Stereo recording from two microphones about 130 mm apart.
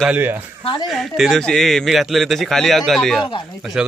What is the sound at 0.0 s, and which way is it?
Speech, 15° right (ahead or behind).